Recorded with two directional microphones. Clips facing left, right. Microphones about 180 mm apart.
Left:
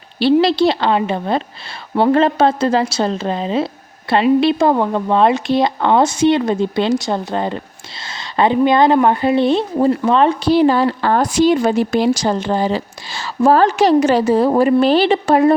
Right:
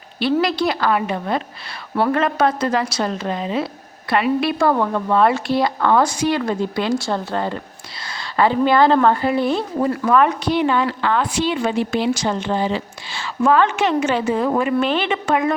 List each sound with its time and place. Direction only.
0.4 s a woman's voice: 30° left (ahead or behind)